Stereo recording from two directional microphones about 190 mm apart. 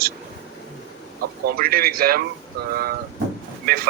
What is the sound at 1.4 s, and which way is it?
Speech, 50° right (ahead or behind).